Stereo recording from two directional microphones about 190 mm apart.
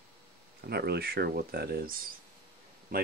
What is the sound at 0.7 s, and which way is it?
A man's voice, 55° right (ahead or behind).